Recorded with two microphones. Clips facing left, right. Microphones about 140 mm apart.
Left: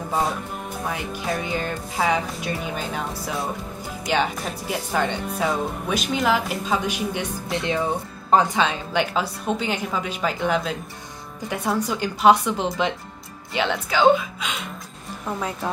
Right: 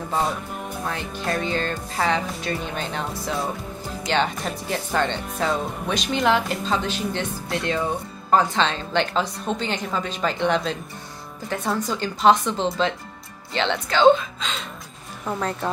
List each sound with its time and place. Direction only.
0.8 s speech: 10° left (ahead or behind)